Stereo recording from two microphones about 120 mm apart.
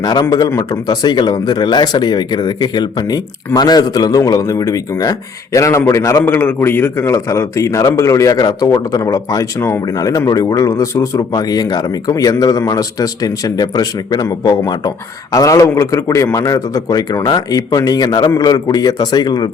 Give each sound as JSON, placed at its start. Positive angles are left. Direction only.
{"t": 0.0, "sound": "a man's voice", "side_deg": 35}